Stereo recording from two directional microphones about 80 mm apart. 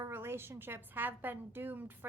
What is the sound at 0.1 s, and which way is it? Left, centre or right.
A woman's voice, right.